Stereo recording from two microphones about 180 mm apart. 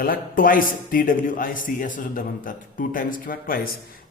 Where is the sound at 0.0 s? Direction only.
50° left (ahead or behind).